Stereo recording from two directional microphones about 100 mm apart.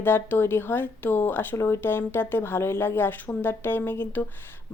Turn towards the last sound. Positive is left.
turn(degrees=20)  # may be behind; listen again after turning